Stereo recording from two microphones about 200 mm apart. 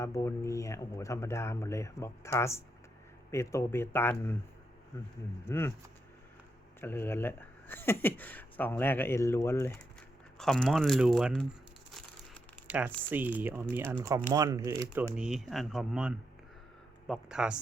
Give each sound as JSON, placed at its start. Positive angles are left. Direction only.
{"t": 0.0, "sound": "speech", "side_deg": 15}
{"t": 6.8, "sound": "speech", "side_deg": 10}
{"t": 12.6, "sound": "a sound", "side_deg": -5}
{"t": 13.1, "sound": "speech", "side_deg": -10}
{"t": 15.1, "sound": "speech", "side_deg": -5}